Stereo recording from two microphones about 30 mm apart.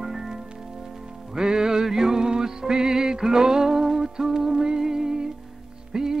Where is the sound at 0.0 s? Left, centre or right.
Centre.